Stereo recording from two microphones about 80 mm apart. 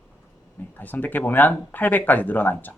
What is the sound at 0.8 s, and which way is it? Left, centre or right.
Speech, left.